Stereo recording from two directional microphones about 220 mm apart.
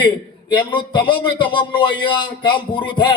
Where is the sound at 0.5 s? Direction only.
20° left (ahead or behind).